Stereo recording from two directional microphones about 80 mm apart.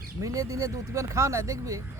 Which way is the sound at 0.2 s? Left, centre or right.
Right.